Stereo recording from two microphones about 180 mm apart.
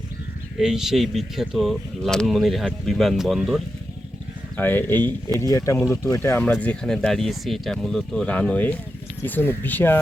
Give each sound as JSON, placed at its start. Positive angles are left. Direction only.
{"t": 0.6, "sound": "speech", "side_deg": 0}
{"t": 4.5, "sound": "speech", "side_deg": 10}